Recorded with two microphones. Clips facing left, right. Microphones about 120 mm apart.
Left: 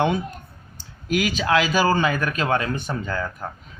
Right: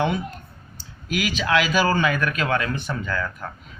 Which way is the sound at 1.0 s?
45° left (ahead or behind).